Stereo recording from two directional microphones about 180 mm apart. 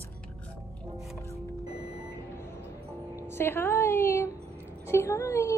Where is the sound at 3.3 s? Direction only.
15° left (ahead or behind).